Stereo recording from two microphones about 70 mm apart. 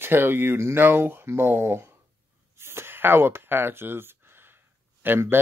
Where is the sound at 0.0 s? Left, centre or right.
Right.